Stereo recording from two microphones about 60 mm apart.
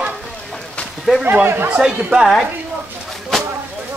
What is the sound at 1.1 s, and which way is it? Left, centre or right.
Speech, centre.